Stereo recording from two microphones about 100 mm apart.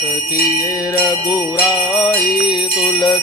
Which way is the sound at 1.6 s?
45° left (ahead or behind).